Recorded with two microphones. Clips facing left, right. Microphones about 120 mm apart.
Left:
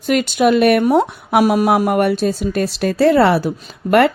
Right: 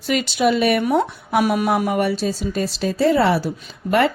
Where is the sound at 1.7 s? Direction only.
55° left (ahead or behind).